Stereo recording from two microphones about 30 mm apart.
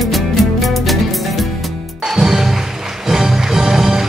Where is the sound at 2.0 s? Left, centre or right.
Centre.